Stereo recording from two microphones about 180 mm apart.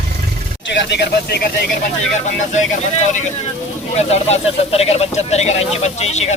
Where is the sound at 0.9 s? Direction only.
70° left (ahead or behind).